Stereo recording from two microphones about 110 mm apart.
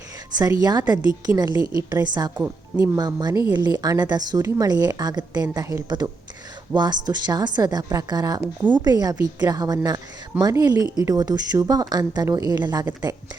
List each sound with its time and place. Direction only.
0.3 s a woman's voice: 40° right (ahead or behind)